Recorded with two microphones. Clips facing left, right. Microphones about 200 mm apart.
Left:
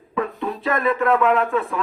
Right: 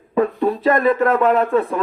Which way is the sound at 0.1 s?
40° right (ahead or behind).